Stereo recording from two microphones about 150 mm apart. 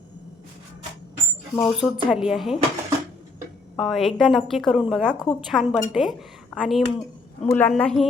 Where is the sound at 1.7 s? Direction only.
5° right (ahead or behind).